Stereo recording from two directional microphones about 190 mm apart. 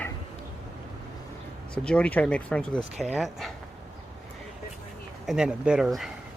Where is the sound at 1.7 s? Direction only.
5° left (ahead or behind).